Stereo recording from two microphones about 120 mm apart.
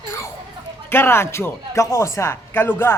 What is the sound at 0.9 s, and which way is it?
Speech, 20° left (ahead or behind).